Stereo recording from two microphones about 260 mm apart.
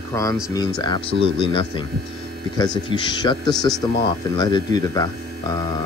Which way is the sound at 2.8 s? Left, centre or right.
Centre.